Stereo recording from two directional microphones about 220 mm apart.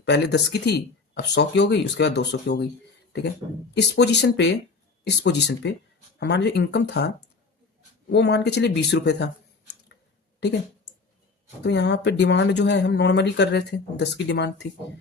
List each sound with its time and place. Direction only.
0.0 s speech: 50° left (ahead or behind)
3.8 s speech: 50° left (ahead or behind)
8.1 s speech: 50° left (ahead or behind)
11.6 s speech: 50° left (ahead or behind)